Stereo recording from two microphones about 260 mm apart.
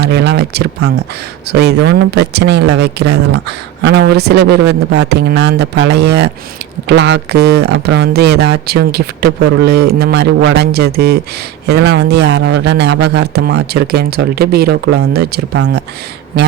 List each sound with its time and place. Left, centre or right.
0.0 s speech: right